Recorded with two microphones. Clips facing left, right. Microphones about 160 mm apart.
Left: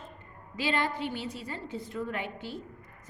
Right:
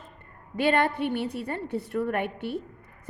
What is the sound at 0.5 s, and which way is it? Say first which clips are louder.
A woman's voice: right 7 dB; 60° right (ahead or behind).